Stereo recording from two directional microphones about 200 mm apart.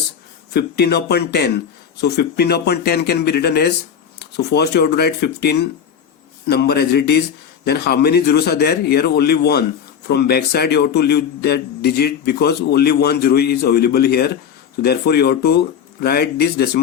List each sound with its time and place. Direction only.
0.5 s a man's voice: 55° left (ahead or behind)